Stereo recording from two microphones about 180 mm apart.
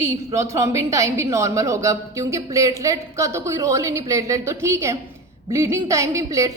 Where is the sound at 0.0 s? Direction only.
15° right (ahead or behind).